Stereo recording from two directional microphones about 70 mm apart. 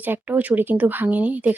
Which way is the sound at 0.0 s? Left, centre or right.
Right.